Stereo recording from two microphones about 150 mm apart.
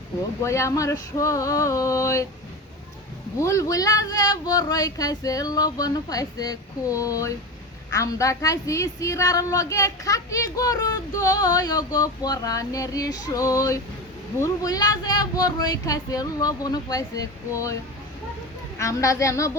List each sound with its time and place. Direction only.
0.4 s a woman's voice: 20° left (ahead or behind)
3.4 s a woman's voice: 20° left (ahead or behind)
18.8 s a woman's voice: 20° left (ahead or behind)